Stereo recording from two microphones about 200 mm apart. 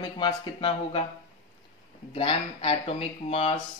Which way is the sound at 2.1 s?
30° left (ahead or behind).